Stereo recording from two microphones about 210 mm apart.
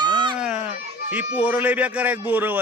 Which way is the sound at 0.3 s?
5° right (ahead or behind).